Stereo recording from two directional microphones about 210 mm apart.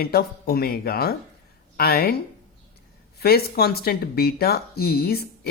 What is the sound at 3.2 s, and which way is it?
Speech, 45° left (ahead or behind).